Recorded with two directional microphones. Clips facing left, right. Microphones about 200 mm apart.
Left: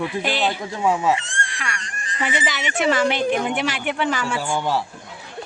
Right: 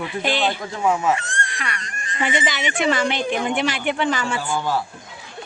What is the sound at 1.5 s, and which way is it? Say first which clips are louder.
Speech: right 1 dB; centre (ahead or behind).